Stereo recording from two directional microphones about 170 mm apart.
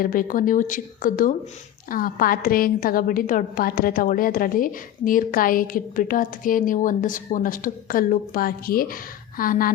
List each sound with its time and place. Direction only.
0.0 s a woman's voice: 55° left (ahead or behind)